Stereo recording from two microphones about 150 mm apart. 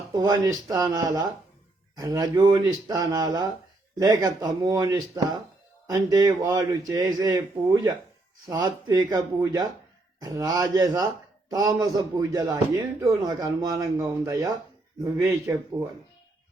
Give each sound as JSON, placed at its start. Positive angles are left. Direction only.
{"t": 0.1, "sound": "a man's voice", "side_deg": -25}